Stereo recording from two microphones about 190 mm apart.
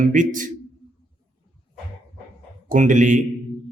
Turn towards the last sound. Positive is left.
turn(degrees=-40)  # may be behind; listen again after turning